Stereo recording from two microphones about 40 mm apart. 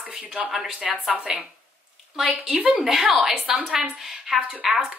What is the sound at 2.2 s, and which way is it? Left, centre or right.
Speech, centre.